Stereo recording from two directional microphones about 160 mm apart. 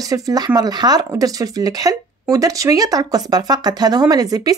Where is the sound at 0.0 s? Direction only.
20° right (ahead or behind).